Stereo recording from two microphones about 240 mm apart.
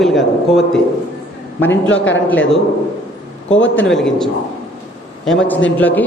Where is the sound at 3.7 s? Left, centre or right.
Centre.